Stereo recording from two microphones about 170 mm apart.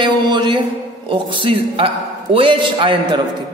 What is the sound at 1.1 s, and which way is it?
A woman's voice, 30° right (ahead or behind).